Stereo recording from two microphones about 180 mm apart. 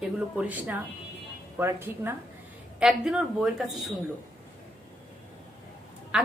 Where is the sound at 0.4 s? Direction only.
10° right (ahead or behind).